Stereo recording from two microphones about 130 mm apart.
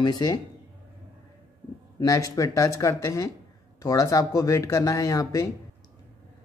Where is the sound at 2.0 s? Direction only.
25° left (ahead or behind).